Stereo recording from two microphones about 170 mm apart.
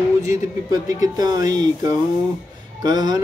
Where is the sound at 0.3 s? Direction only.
20° right (ahead or behind).